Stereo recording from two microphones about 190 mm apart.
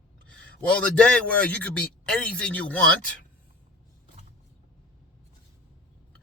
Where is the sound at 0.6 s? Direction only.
5° left (ahead or behind).